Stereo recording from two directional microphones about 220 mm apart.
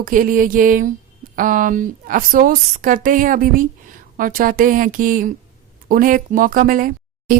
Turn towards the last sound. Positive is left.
turn(degrees=-40)  # may be behind; listen again after turning